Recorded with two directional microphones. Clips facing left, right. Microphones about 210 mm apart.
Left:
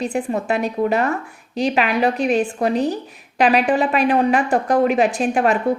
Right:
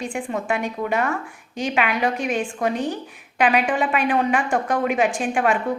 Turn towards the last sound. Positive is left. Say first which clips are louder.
# left 3 dB
turn(degrees=40)  # may be behind; listen again after turning